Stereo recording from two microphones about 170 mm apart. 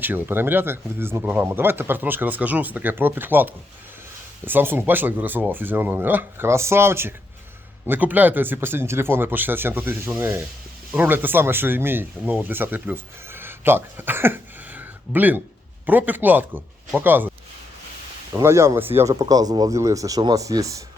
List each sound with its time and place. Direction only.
0.0 s speech: 10° right (ahead or behind)
18.3 s speech: 15° right (ahead or behind)